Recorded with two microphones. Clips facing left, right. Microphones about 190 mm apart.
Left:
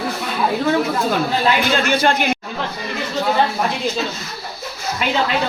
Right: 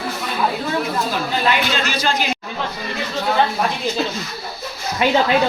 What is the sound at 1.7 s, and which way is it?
Speech, 55° left (ahead or behind).